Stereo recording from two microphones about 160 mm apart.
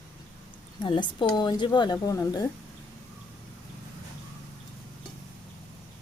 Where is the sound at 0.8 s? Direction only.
30° left (ahead or behind).